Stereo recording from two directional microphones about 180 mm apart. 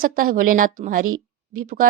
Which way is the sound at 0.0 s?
50° right (ahead or behind).